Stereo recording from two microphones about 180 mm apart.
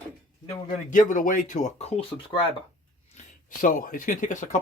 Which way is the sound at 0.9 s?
45° left (ahead or behind).